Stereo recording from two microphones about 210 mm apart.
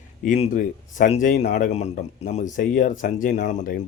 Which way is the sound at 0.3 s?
40° left (ahead or behind).